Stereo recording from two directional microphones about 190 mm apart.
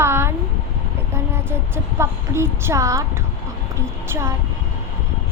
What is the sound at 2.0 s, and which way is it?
A child's voice, 15° right (ahead or behind).